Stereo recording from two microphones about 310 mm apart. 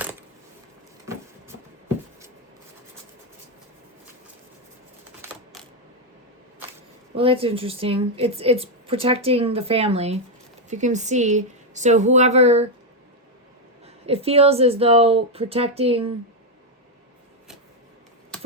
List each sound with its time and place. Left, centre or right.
7.2 s a woman's voice: centre
13.8 s a woman's voice: centre